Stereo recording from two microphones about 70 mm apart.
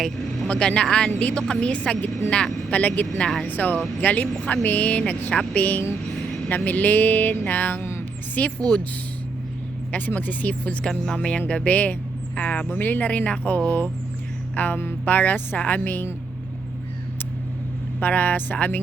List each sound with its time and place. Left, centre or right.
0.4 s speech: centre; by 8.0 s left
8.4 s speech: centre
10.1 s speech: left
14.5 s a sound: left
15.0 s speech: left
18.0 s speech: left